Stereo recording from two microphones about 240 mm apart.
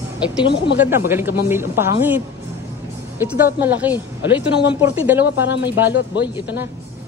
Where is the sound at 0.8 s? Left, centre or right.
Centre.